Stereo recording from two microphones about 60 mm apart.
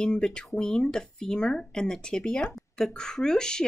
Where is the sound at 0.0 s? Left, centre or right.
Centre.